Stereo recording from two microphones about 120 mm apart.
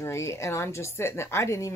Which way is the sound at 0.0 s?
25° left (ahead or behind).